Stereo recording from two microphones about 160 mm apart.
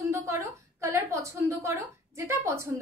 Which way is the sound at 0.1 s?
15° right (ahead or behind).